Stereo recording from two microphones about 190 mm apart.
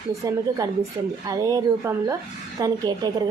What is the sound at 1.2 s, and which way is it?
A woman's voice, 20° right (ahead or behind).